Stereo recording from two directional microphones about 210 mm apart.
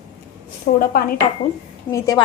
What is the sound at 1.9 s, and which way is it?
Speech, 15° left (ahead or behind).